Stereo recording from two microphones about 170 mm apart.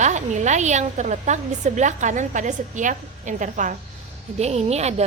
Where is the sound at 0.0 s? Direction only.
45° right (ahead or behind).